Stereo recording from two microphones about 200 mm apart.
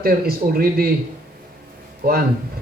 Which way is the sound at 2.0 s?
50° right (ahead or behind).